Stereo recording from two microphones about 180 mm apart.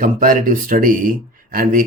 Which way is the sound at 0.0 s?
50° right (ahead or behind).